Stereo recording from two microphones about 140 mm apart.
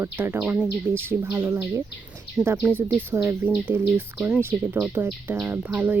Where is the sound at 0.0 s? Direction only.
15° right (ahead or behind).